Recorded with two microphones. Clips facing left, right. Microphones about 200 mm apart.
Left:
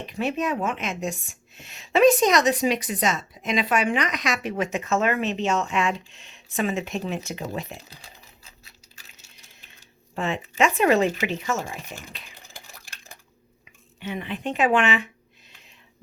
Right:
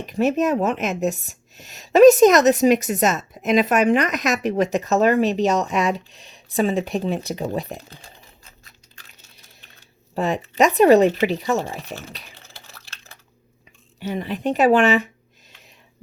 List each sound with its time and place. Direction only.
0.0 s speech: 45° right (ahead or behind)
10.2 s speech: 40° right (ahead or behind)
12.3 s a sound: 15° left (ahead or behind)
14.0 s speech: 40° right (ahead or behind)